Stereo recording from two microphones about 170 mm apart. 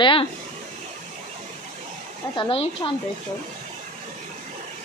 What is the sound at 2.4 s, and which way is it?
Speech, 30° left (ahead or behind).